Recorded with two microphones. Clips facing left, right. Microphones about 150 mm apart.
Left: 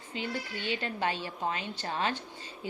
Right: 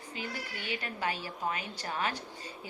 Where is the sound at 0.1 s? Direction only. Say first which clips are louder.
Left 5 dB; 25° left (ahead or behind).